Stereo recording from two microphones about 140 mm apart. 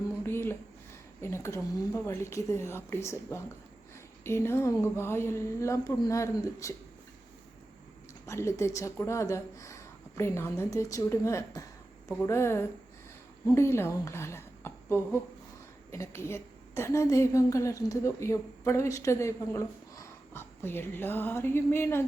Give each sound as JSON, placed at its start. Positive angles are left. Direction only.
{"t": 0.2, "sound": "a sound", "side_deg": 15}
{"t": 1.2, "sound": "a woman's voice", "side_deg": 20}
{"t": 8.3, "sound": "a woman's voice", "side_deg": 20}